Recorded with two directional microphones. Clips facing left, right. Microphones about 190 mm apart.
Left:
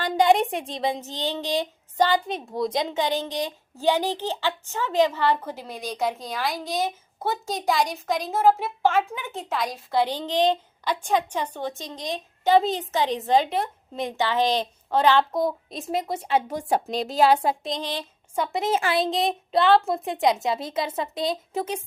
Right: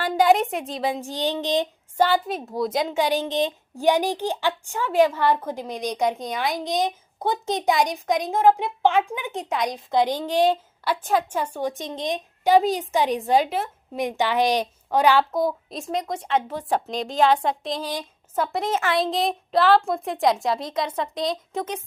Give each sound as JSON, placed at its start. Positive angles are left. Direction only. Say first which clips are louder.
{"t": 0.0, "sound": "a woman's voice", "louder": "right 1 dB", "side_deg": -5}
{"t": 6.1, "sound": "a woman's voice", "louder": "right 3 dB", "side_deg": 0}
{"t": 6.7, "sound": "a woman's voice", "louder": "right 3 dB", "side_deg": -15}
{"t": 7.7, "sound": "a woman's voice", "louder": "right 2 dB", "side_deg": 0}
{"t": 9.0, "sound": "a woman's voice", "louder": "right 2 dB", "side_deg": -15}
{"t": 18.4, "sound": "a woman's voice", "louder": "left 2 dB", "side_deg": 5}
{"t": 18.7, "sound": "speech", "louder": "even", "side_deg": 30}
{"t": 18.9, "sound": "a woman's voice", "louder": "right 1 dB", "side_deg": 0}